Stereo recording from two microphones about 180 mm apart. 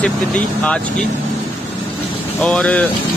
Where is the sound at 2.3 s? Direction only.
5° left (ahead or behind).